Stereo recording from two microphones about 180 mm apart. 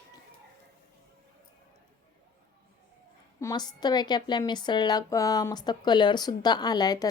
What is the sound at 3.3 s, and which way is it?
A woman's voice, 20° left (ahead or behind).